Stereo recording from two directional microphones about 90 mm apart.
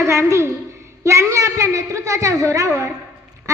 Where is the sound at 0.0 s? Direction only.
35° right (ahead or behind).